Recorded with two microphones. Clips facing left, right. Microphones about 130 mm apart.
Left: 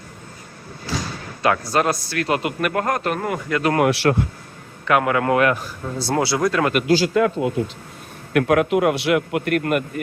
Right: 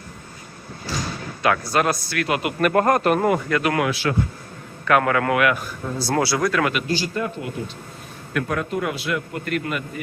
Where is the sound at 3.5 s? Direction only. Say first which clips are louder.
Left 1 dB; 30° left (ahead or behind).